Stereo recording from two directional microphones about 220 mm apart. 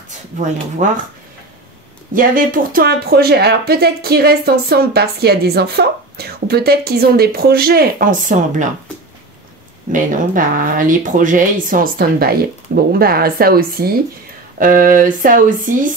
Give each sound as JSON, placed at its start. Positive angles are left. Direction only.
{"t": 0.8, "sound": "speech", "side_deg": -35}
{"t": 2.1, "sound": "speech", "side_deg": -40}
{"t": 9.9, "sound": "speech", "side_deg": -35}